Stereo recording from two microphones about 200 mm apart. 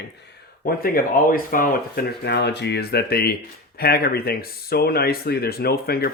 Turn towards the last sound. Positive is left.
turn(degrees=50)  # may be behind; listen again after turning